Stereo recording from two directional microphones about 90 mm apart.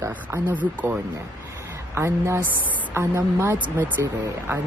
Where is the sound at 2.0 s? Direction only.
30° right (ahead or behind).